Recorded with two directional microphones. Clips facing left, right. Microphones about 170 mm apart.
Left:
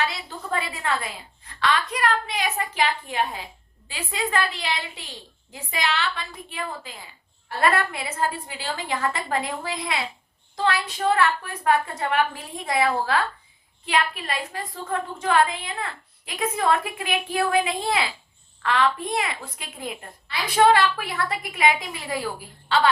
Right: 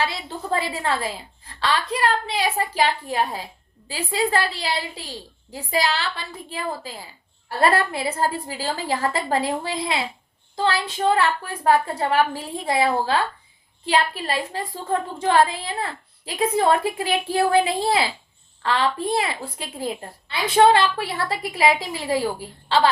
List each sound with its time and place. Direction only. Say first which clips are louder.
0.0 s a woman's voice: right 2 dB; 30° right (ahead or behind)